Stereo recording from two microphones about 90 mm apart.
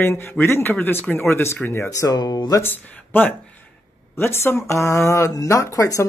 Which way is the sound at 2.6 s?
20° left (ahead or behind).